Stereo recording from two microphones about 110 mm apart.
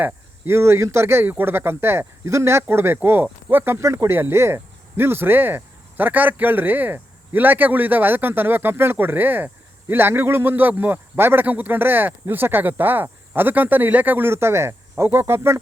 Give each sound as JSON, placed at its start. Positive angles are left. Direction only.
{"t": 0.0, "sound": "speech", "side_deg": -20}